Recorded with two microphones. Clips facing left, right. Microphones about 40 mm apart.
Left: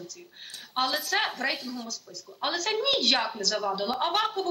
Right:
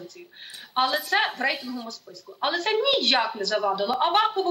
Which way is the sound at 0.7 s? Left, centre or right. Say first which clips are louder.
Right 4 dB; centre.